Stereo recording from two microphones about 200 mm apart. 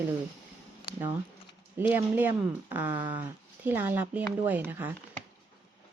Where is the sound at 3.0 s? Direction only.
20° right (ahead or behind).